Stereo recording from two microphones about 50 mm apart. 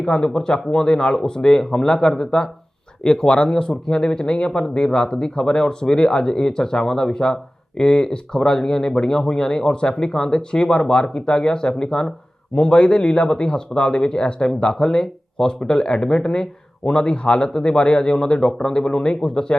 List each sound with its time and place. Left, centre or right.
0.0 s speech: centre